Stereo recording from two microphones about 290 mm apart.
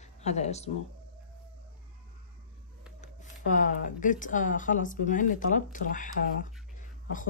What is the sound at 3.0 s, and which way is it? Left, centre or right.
Speech, left.